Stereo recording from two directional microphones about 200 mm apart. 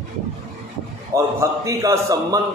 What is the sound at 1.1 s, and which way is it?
A man's voice, 15° right (ahead or behind).